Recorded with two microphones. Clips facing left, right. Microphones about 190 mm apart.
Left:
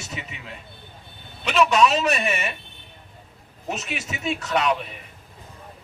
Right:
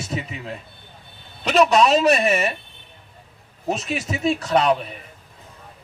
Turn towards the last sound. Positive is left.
turn(degrees=-35)  # may be behind; listen again after turning